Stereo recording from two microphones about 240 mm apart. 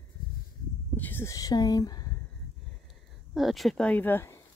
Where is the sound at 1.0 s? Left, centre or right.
Centre.